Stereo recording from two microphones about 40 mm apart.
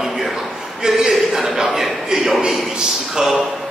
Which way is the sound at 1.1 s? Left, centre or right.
Centre.